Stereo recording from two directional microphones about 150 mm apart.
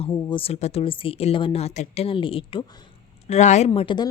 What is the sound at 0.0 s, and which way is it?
A woman's voice, 35° left (ahead or behind).